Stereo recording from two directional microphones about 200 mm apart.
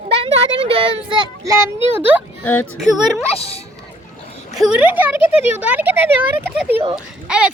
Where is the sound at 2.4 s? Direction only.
10° left (ahead or behind).